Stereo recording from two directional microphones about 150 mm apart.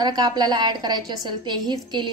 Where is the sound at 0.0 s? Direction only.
25° right (ahead or behind).